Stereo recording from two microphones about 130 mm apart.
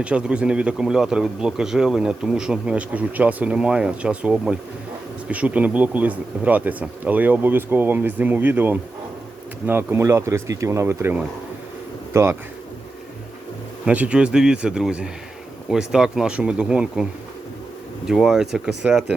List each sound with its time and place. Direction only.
0.0 s speech: 10° right (ahead or behind)
13.8 s speech: 10° right (ahead or behind)